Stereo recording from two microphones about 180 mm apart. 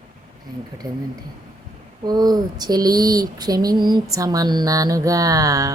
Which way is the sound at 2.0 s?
20° right (ahead or behind).